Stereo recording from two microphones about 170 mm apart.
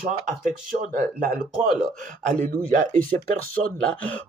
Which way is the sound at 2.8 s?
50° right (ahead or behind).